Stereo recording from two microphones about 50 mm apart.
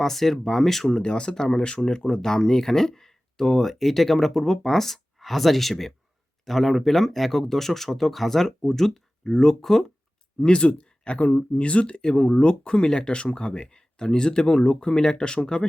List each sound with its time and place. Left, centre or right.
0.0 s speech: centre
1.0 s speech: centre
10.4 s speech: left